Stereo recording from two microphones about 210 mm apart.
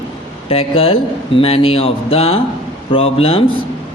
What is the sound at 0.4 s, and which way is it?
Speech, 25° left (ahead or behind).